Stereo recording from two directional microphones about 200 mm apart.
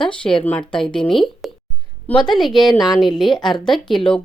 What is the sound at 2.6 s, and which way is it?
Speech, 20° left (ahead or behind).